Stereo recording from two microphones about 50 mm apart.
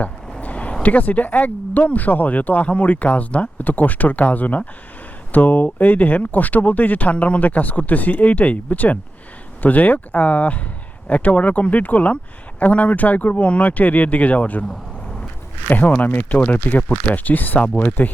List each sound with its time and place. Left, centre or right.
0.4 s speech: left
15.6 s speech: left